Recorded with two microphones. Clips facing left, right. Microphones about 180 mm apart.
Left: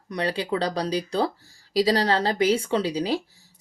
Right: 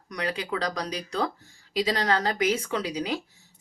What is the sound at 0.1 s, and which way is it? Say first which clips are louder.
Speech: left 4 dB; 30° left (ahead or behind).